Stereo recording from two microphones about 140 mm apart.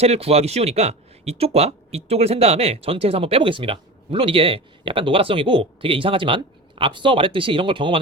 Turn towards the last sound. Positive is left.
turn(degrees=-35)  # may be behind; listen again after turning